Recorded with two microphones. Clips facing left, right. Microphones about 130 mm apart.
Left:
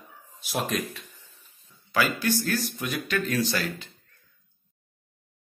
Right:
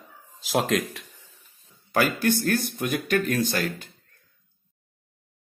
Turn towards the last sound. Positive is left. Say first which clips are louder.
# right 2 dB
turn(degrees=-50)  # may be behind; listen again after turning